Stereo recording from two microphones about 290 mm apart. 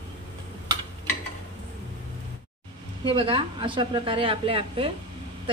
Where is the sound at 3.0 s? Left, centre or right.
Centre.